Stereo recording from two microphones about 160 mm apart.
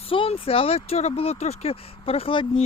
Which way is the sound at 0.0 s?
35° left (ahead or behind).